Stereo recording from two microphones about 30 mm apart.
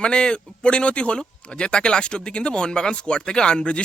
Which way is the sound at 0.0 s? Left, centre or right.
Left.